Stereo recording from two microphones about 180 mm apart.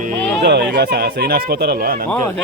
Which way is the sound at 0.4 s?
65° right (ahead or behind).